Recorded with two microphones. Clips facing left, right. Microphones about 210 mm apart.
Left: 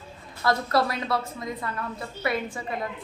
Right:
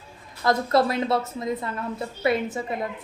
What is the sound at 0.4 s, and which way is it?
A woman's voice, 25° right (ahead or behind).